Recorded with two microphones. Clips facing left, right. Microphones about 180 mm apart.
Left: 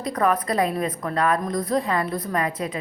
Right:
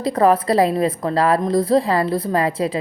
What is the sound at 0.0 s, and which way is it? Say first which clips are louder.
A woman's voice: right 6 dB; 30° right (ahead or behind).